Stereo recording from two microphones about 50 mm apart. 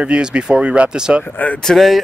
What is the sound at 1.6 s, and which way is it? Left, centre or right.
Speech, centre.